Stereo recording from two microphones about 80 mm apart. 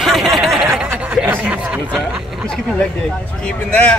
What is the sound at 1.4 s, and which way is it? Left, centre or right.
Speech, centre.